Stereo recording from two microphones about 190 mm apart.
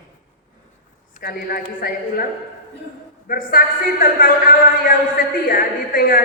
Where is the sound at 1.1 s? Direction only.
50° left (ahead or behind).